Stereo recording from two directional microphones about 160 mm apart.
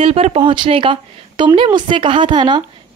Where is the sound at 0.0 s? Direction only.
40° right (ahead or behind).